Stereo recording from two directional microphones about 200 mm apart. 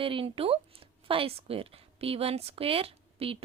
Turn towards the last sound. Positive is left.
turn(degrees=-30)  # may be behind; listen again after turning